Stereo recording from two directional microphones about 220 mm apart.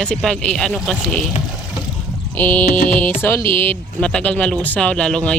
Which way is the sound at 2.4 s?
5° left (ahead or behind).